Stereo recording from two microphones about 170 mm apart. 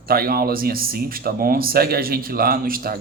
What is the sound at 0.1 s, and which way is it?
Speech, 60° right (ahead or behind).